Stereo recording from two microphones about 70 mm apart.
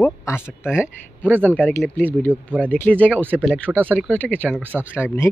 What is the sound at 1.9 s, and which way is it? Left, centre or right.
Speech, left.